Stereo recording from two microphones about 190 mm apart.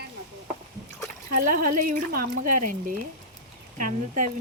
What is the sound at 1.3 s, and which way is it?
Speech, 45° right (ahead or behind).